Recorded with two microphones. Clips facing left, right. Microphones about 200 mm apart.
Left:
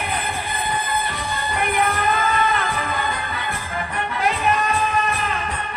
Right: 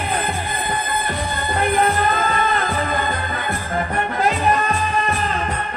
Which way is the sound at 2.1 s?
45° right (ahead or behind).